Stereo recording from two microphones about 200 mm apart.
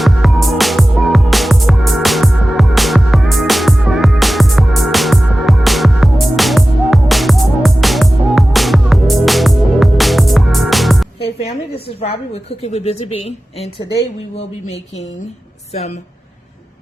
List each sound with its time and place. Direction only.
0.0 s music: centre (ahead or behind)
11.9 s a woman's voice: 30° left (ahead or behind)